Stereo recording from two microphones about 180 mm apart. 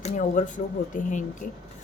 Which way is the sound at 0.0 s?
45° left (ahead or behind).